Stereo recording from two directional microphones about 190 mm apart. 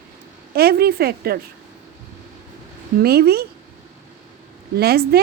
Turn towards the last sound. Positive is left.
turn(degrees=-55)  # may be behind; listen again after turning